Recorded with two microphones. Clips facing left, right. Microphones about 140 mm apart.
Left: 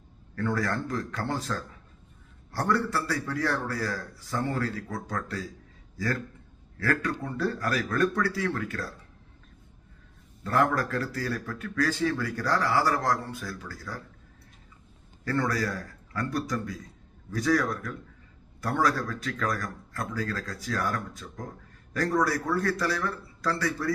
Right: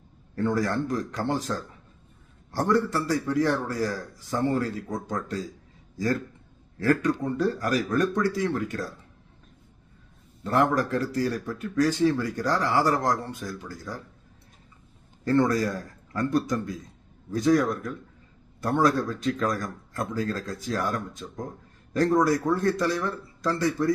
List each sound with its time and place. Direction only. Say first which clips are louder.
0.3 s speech: right 4 dB; 20° right (ahead or behind)
6.7 s speech: right 5 dB; 20° right (ahead or behind)
10.4 s speech: right 2 dB; 20° right (ahead or behind)
15.2 s speech: right 6 dB; 20° right (ahead or behind)